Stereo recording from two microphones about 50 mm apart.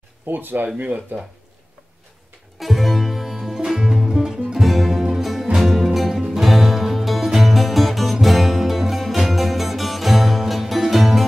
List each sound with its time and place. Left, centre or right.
0.3 s speech: right
2.6 s music: centre